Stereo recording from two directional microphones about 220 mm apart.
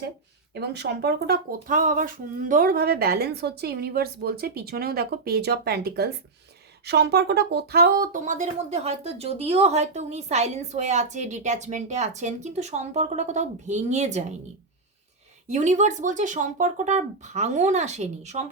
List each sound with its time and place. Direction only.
0.5 s speech: 50° right (ahead or behind); by 14.3 s 30° right (ahead or behind)
15.4 s speech: 30° right (ahead or behind)